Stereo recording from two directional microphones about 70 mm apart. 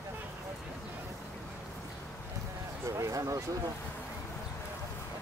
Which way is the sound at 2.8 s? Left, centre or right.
Right.